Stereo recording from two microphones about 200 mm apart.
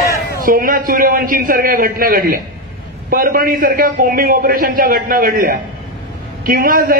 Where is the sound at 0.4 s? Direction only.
45° right (ahead or behind).